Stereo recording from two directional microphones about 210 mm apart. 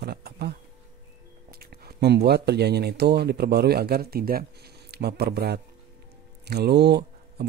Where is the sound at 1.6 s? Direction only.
50° right (ahead or behind).